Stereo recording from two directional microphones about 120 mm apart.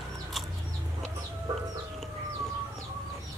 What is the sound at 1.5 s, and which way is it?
Chicken, 35° right (ahead or behind).